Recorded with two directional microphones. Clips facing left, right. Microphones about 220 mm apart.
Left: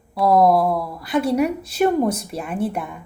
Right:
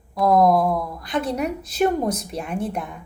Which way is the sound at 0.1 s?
5° left (ahead or behind).